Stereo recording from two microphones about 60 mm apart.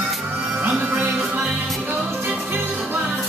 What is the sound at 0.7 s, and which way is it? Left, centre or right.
Music, right.